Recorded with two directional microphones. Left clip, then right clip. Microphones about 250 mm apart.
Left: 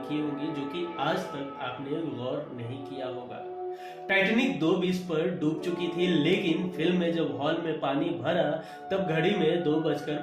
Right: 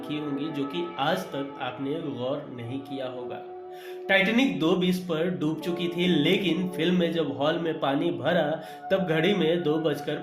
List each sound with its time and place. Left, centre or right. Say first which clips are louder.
0.1 s speech: right 1 dB; right
4.1 s speech: right 3 dB; right